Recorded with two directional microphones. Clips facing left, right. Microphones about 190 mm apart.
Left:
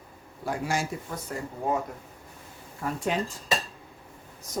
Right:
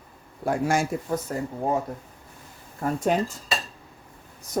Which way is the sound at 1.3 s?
40° right (ahead or behind).